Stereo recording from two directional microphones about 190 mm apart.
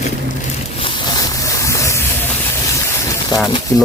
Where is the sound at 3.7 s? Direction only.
15° left (ahead or behind).